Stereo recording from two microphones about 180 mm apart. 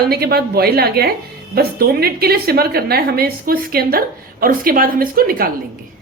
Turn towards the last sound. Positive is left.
turn(degrees=-55)  # may be behind; listen again after turning